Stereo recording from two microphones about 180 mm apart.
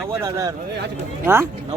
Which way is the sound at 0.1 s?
15° right (ahead or behind).